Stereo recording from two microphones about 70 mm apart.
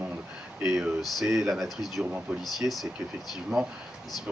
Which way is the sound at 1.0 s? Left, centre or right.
Centre.